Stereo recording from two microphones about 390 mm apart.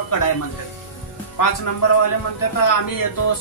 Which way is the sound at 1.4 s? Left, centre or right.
Left.